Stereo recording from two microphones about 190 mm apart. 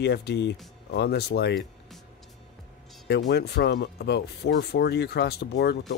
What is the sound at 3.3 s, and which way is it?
Speech, 60° left (ahead or behind).